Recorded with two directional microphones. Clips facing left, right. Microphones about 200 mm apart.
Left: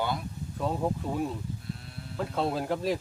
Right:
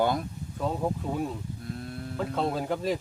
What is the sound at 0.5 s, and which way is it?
Speech, centre (ahead or behind).